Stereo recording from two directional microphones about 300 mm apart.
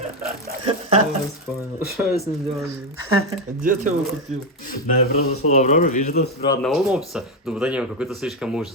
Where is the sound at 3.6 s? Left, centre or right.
Right.